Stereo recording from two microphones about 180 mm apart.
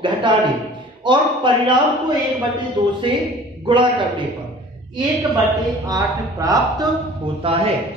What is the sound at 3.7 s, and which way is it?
Speech, 25° right (ahead or behind).